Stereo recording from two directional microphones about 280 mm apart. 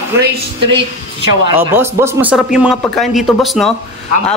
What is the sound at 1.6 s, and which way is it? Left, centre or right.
A man's voice, centre.